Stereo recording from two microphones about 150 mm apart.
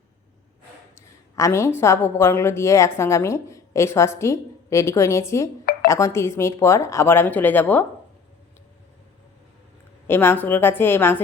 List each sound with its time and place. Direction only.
1.4 s a woman's voice: 20° left (ahead or behind)
10.1 s a woman's voice: 15° left (ahead or behind)